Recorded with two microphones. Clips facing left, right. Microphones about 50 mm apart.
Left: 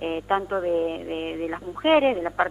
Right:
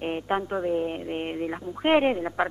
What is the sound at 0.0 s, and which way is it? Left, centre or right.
A man's voice, centre.